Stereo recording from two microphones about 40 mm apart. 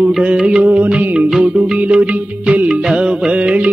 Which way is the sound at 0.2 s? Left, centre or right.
Right.